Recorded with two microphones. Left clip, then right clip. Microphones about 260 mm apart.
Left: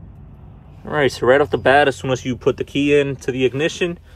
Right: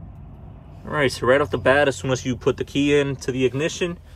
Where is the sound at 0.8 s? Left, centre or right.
Centre.